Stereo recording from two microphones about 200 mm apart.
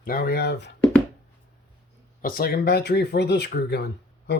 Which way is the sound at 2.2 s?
45° left (ahead or behind).